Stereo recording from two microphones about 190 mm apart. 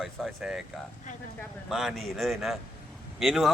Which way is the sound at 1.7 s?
Centre (ahead or behind).